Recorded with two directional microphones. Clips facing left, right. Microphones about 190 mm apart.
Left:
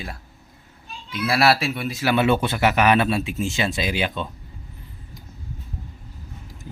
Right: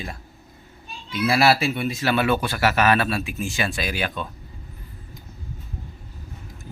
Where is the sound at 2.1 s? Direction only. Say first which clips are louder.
Left 3 dB; 20° left (ahead or behind).